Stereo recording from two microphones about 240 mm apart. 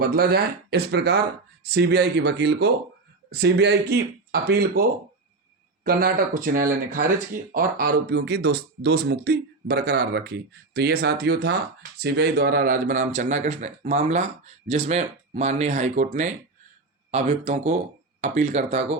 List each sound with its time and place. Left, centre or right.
0.0 s speech: right
17.1 s speech: right